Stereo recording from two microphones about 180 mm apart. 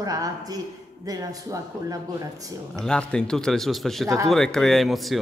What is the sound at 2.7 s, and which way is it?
Speech, 5° left (ahead or behind).